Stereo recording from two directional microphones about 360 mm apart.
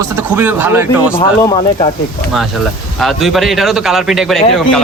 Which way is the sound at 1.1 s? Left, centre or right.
Centre.